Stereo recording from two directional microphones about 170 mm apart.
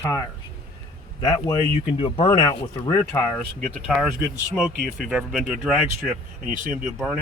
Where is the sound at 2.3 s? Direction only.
25° left (ahead or behind).